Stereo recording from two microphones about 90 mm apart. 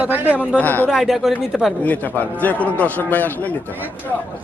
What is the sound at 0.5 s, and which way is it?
Speech, 20° left (ahead or behind).